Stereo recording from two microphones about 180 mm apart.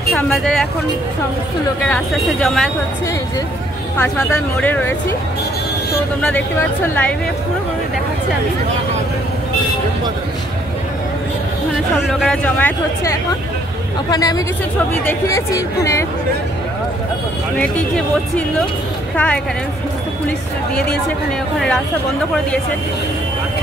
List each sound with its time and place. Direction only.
0.1 s speech: centre (ahead or behind)
1.9 s speech: 5° left (ahead or behind)
4.0 s speech: 10° left (ahead or behind)
6.2 s speech: 10° left (ahead or behind)
12.1 s speech: centre (ahead or behind)
17.6 s speech: 5° left (ahead or behind)
19.1 s speech: 5° left (ahead or behind)